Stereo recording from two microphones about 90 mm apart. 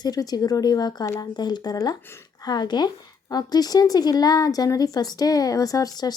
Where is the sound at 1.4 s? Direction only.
50° left (ahead or behind).